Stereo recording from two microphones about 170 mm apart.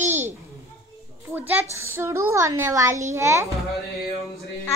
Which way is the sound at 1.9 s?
15° right (ahead or behind).